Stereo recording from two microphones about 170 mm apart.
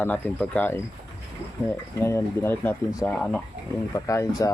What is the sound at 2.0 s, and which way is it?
Speech, 15° left (ahead or behind).